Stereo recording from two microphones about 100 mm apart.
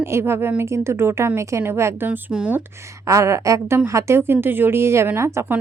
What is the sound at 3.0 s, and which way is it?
A woman's voice, 30° right (ahead or behind).